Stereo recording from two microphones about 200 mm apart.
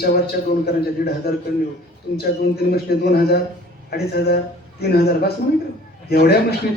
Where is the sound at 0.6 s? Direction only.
50° left (ahead or behind).